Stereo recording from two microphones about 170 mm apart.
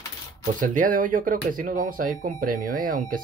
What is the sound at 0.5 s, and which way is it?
Speech, 50° right (ahead or behind).